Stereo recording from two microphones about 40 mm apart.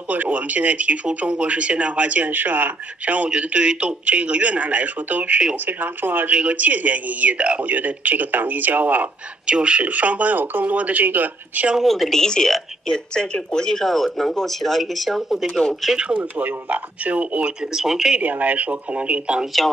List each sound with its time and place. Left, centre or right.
0.1 s speech: right
2.3 s speech: right
3.3 s speech: right
5.7 s speech: right
6.3 s speech: right
9.5 s speech: right
9.8 s speech: right
11.8 s a woman's voice: centre
12.2 s a woman's voice: centre
16.2 s speech: right
17.7 s speech: centre
18.2 s speech: right